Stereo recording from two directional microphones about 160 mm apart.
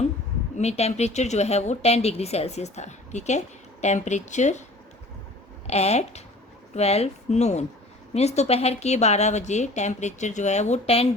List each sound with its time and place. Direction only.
0.5 s speech: 40° left (ahead or behind)
5.6 s speech: 40° left (ahead or behind)